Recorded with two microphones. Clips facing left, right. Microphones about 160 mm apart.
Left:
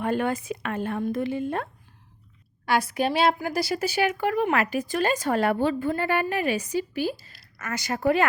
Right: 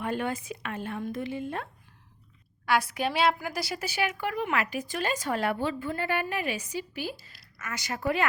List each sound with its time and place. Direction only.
0.0 s a woman's voice: 50° left (ahead or behind)
2.6 s a woman's voice: 40° left (ahead or behind)